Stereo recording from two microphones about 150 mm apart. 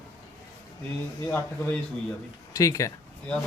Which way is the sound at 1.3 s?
15° left (ahead or behind).